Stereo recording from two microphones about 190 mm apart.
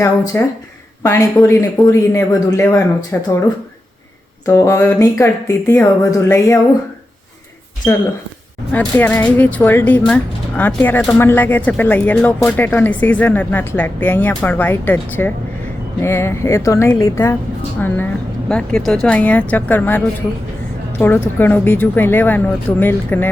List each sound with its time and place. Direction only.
0.3 s speech: 10° left (ahead or behind)
4.4 s speech: 15° left (ahead or behind)
8.7 s speech: 10° left (ahead or behind)
21.0 s speech: 10° left (ahead or behind)